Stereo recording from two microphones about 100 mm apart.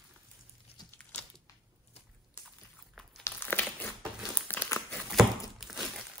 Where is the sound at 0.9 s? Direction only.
20° left (ahead or behind).